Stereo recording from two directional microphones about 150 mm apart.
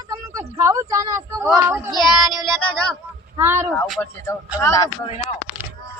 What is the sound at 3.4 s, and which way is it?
Speech, 15° right (ahead or behind).